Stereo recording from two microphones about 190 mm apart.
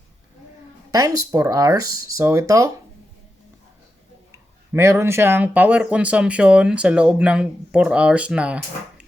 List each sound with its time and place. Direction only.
0.9 s speech: 20° right (ahead or behind)
4.3 s speech: 15° right (ahead or behind)